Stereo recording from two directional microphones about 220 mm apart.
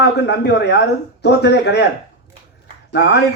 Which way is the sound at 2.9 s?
50° left (ahead or behind).